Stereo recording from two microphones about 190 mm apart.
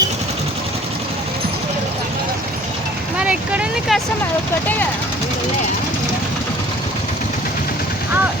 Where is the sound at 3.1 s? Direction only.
5° right (ahead or behind).